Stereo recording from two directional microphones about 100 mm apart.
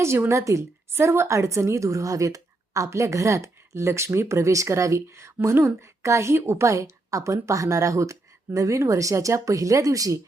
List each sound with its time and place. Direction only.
0.0 s a woman's voice: 25° right (ahead or behind)